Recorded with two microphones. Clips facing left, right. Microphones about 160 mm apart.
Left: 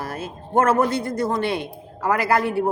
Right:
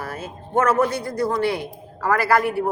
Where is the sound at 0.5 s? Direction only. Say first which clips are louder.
Left 1 dB; 50° left (ahead or behind).